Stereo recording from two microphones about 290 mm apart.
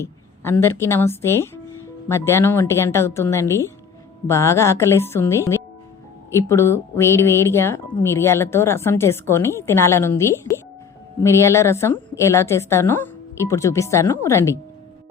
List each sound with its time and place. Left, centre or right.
0.0 s speech: centre